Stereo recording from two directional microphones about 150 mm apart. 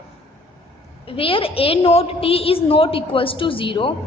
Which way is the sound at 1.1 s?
35° left (ahead or behind).